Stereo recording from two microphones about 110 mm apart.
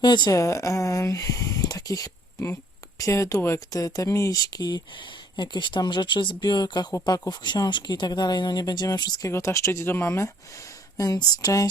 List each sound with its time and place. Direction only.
0.0 s speech: 40° left (ahead or behind)
0.3 s speech: 30° left (ahead or behind)